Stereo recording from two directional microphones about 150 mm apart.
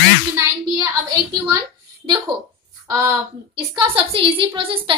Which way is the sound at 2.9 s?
20° right (ahead or behind).